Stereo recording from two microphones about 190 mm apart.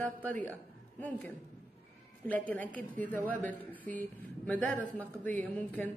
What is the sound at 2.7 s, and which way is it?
Speech, 10° left (ahead or behind).